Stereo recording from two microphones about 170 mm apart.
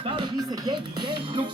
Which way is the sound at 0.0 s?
25° right (ahead or behind).